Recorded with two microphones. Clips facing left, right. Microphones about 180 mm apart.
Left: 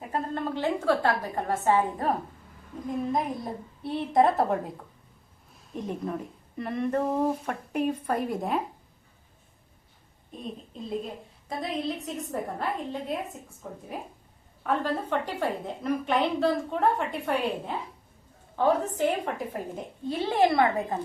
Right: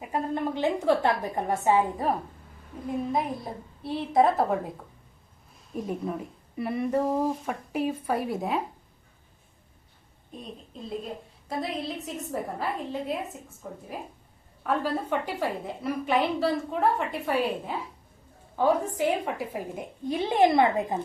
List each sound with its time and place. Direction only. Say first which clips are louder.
0.1 s a woman's voice: right 2 dB; 15° right (ahead or behind)
5.7 s speech: right 1 dB; 5° right (ahead or behind)
10.3 s a woman's voice: left 3 dB; centre (ahead or behind); by 21.0 s 20° right (ahead or behind)